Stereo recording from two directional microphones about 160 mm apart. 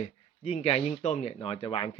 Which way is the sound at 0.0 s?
40° left (ahead or behind).